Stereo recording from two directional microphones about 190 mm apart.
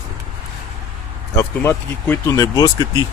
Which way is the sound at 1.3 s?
15° left (ahead or behind).